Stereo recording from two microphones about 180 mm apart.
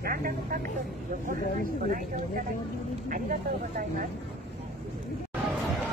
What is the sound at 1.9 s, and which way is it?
Speech, 50° right (ahead or behind).